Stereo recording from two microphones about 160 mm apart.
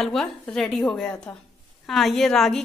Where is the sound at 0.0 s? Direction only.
Centre (ahead or behind).